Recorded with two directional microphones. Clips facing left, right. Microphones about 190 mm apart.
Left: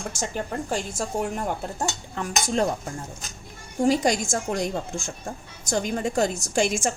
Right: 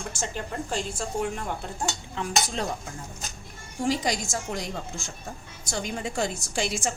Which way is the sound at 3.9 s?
50° left (ahead or behind).